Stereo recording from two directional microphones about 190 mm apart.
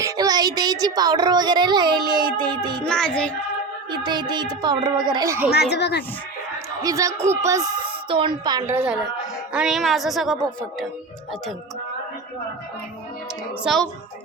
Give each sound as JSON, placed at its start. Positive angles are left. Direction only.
{"t": 0.0, "sound": "speech", "side_deg": -20}
{"t": 2.7, "sound": "speech", "side_deg": 5}
{"t": 3.9, "sound": "speech", "side_deg": -25}
{"t": 5.5, "sound": "speech", "side_deg": 60}
{"t": 6.8, "sound": "a woman's voice", "side_deg": -15}
{"t": 13.7, "sound": "speech", "side_deg": 0}